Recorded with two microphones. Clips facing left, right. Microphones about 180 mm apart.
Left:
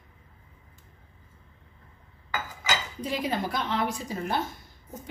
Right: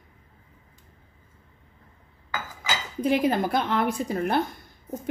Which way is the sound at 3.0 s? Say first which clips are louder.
Right 9 dB; 50° right (ahead or behind).